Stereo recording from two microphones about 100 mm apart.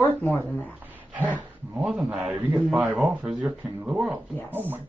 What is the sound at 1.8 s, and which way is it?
A man's voice, 5° right (ahead or behind).